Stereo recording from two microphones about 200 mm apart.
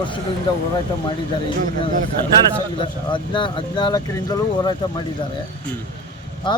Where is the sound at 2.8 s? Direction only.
25° left (ahead or behind).